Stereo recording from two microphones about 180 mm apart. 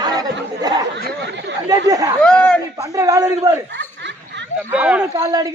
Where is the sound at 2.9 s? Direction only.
20° right (ahead or behind).